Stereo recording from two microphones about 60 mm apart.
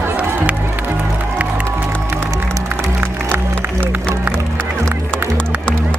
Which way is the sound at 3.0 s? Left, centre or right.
Right.